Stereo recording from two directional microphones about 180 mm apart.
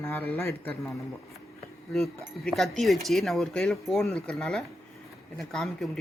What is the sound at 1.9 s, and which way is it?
Speech, centre (ahead or behind).